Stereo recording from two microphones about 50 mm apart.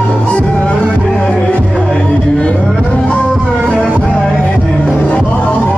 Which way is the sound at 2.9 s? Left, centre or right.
Left.